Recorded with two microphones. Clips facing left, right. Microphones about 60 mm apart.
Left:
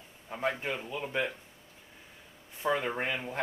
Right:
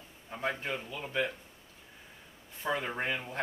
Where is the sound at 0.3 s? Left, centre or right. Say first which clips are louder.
Left 2 dB; centre.